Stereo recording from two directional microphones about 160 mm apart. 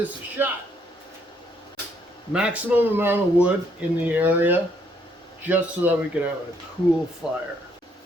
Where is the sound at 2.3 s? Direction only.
5° right (ahead or behind).